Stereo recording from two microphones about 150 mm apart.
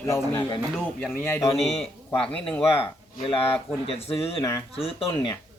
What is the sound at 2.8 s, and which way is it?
Speech, 40° left (ahead or behind).